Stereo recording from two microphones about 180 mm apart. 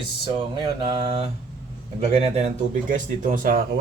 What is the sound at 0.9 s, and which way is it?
Speech, 30° right (ahead or behind).